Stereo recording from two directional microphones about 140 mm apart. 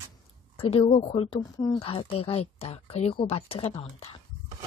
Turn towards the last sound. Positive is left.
turn(degrees=40)  # may be behind; listen again after turning